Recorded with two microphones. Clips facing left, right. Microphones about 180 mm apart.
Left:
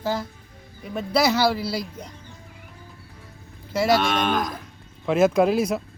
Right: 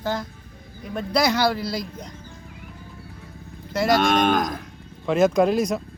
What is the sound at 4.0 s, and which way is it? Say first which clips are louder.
Speech: right 3 dB; 50° right (ahead or behind).